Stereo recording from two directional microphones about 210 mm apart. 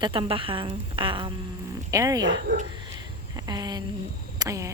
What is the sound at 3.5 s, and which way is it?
Speech, 20° right (ahead or behind).